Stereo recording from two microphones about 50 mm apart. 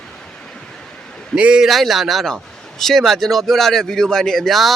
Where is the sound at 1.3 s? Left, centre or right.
Right.